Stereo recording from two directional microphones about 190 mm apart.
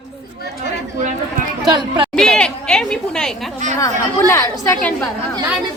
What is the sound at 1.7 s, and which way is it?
Speech, 25° right (ahead or behind).